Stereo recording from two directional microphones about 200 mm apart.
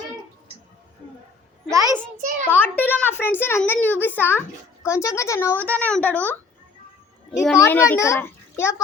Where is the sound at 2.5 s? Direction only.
10° left (ahead or behind).